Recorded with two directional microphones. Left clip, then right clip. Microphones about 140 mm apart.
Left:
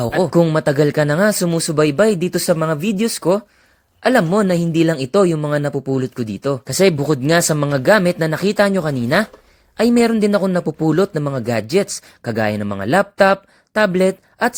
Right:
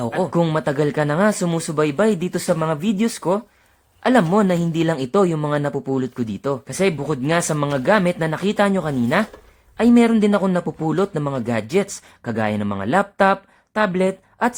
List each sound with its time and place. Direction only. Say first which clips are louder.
0.0 s speech: left 5 dB; 25° left (ahead or behind)
6.7 s speech: left 8 dB; 30° left (ahead or behind)